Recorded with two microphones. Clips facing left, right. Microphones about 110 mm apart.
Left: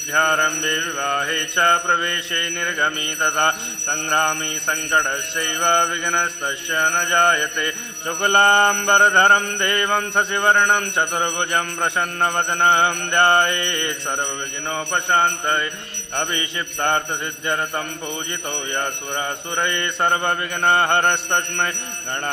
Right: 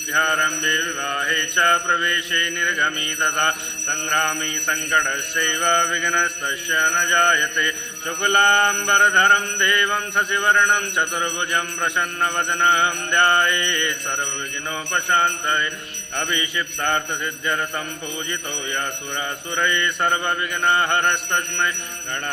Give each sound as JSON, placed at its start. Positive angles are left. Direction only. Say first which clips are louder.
{"t": 0.1, "sound": "mantra", "louder": "left 2 dB", "side_deg": 35}
{"t": 4.1, "sound": "alarm", "louder": "left 2 dB", "side_deg": 30}
{"t": 8.2, "sound": "mantra", "louder": "left 2 dB", "side_deg": 35}
{"t": 19.5, "sound": "mantra", "louder": "right 2 dB", "side_deg": 30}